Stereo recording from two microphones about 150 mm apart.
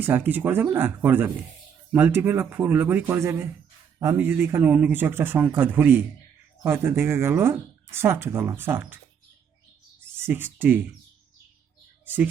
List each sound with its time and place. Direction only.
0.0 s speech: 15° right (ahead or behind)
10.0 s a sound: 15° right (ahead or behind)
12.0 s speech: 10° right (ahead or behind)